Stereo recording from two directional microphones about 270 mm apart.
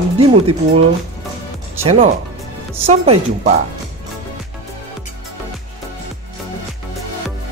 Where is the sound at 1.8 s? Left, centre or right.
Right.